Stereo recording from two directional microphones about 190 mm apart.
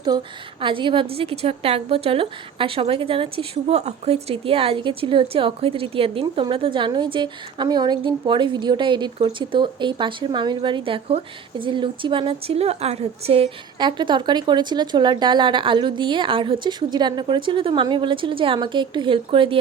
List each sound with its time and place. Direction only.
0.0 s a woman's voice: 25° right (ahead or behind)